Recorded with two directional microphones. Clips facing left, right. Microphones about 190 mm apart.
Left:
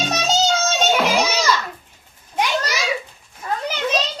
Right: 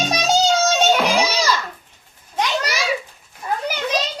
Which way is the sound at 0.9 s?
5° left (ahead or behind).